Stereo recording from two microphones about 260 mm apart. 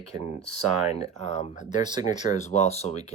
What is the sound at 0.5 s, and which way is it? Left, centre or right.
Speech, right.